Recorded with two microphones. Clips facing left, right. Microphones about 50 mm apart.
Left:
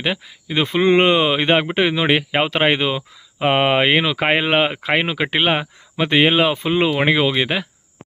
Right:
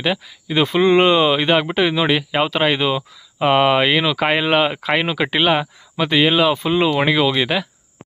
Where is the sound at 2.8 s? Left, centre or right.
Centre.